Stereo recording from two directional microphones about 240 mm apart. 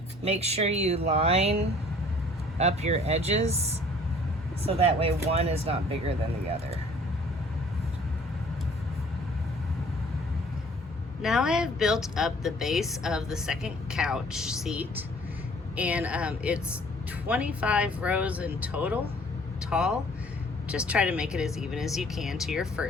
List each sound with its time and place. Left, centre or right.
0.3 s speech: right
4.6 s speech: right
11.2 s speech: centre